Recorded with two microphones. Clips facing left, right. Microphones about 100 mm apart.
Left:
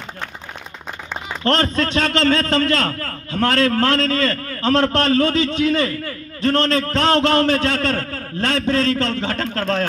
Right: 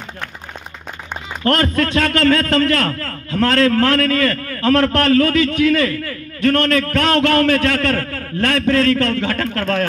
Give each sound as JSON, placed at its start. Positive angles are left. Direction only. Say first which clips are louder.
{"t": 1.4, "sound": "a man's voice", "louder": "right 2 dB", "side_deg": 25}